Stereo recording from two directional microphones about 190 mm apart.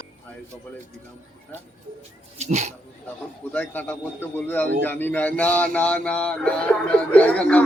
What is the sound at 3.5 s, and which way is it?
A man's voice, 10° left (ahead or behind).